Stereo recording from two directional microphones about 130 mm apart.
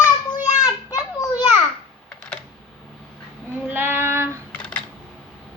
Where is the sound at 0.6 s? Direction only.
25° left (ahead or behind).